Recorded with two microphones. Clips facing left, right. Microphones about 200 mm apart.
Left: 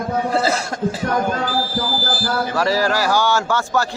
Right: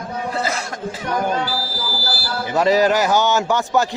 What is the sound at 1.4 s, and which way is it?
Speech, 50° left (ahead or behind).